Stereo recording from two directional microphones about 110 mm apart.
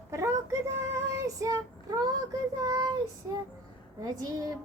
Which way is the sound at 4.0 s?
35° right (ahead or behind).